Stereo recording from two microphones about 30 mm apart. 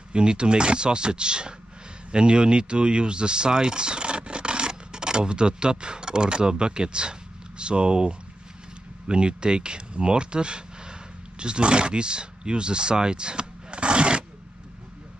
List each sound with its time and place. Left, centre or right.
0.1 s speech: right